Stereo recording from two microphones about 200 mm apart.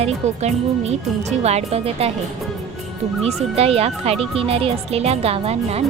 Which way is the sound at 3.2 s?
30° right (ahead or behind).